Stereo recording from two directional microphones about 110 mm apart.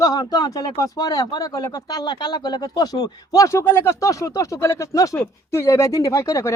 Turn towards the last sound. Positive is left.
turn(degrees=25)  # may be behind; listen again after turning